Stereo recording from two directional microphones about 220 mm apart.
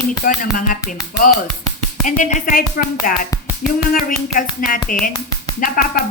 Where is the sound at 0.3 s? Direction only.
40° left (ahead or behind).